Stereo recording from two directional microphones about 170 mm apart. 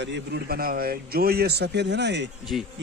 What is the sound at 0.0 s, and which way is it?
A man's voice, 80° right.